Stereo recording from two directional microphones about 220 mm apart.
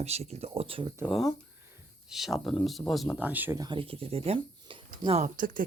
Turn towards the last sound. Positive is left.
turn(degrees=-40)  # may be behind; listen again after turning